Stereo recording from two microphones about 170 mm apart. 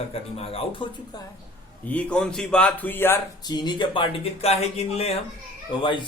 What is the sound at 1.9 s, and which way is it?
Speech, 5° left (ahead or behind).